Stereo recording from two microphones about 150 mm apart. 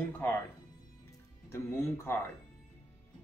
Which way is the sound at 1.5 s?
15° left (ahead or behind).